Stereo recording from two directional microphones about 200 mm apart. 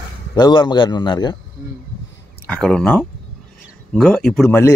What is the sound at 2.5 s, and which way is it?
Speech, 5° left (ahead or behind).